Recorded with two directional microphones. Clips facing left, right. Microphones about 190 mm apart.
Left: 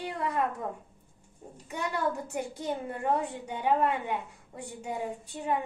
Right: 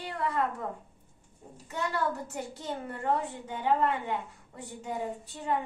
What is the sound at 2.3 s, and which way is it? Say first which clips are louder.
A woman's voice: left 4 dB; 15° left (ahead or behind).